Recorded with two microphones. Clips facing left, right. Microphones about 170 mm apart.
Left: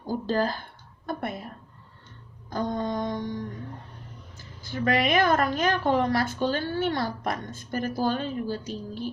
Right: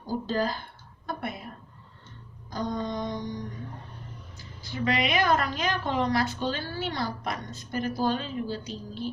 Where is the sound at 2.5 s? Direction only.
55° left (ahead or behind).